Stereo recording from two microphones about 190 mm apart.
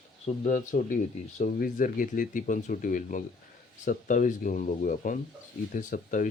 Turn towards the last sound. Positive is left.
turn(degrees=45)  # may be behind; listen again after turning